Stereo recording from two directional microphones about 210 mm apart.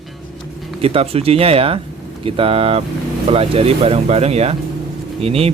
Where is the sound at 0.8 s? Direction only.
30° right (ahead or behind).